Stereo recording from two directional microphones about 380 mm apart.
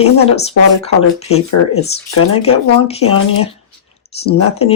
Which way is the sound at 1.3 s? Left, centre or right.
Left.